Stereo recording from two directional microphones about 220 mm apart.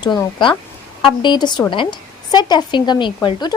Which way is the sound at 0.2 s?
20° left (ahead or behind).